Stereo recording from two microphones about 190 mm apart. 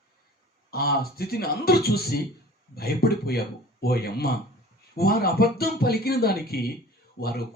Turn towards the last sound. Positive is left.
turn(degrees=55)  # may be behind; listen again after turning